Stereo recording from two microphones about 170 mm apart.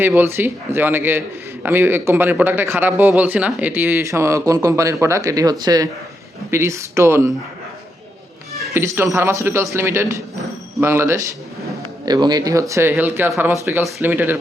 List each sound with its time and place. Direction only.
0.0 s speech: 10° right (ahead or behind)
8.7 s speech: 15° right (ahead or behind)